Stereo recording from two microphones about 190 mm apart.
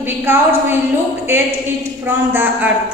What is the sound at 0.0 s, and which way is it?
A woman's voice, 10° right (ahead or behind).